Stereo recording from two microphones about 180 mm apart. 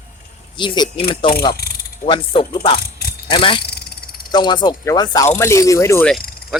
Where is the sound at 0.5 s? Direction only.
25° left (ahead or behind).